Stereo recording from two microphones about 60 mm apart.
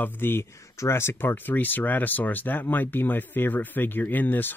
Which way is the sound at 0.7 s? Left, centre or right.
Left.